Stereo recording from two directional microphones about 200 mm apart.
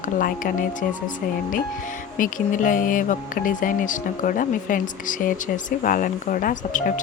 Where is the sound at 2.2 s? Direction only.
40° left (ahead or behind).